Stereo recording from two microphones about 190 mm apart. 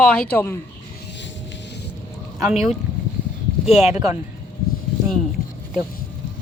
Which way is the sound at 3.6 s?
35° left (ahead or behind).